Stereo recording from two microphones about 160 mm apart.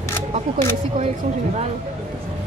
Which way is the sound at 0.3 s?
50° right (ahead or behind).